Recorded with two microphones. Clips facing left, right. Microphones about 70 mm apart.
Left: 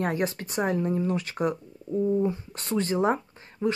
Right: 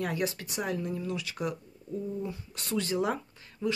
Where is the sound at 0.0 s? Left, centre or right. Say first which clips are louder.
Left 4 dB; left.